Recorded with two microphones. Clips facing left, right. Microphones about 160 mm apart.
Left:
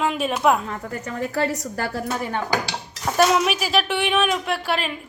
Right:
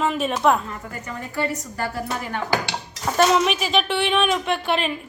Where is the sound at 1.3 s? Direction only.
85° left.